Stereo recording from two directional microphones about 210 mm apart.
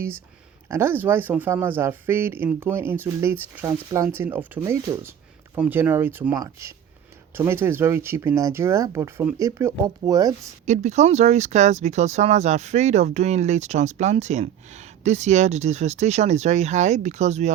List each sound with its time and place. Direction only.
0.7 s speech: 10° right (ahead or behind)
10.7 s speech: 35° right (ahead or behind)